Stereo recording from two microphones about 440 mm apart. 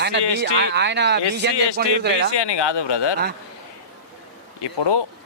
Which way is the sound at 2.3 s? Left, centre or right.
Left.